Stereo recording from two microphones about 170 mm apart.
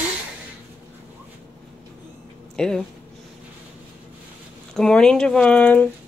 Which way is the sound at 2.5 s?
5° left (ahead or behind).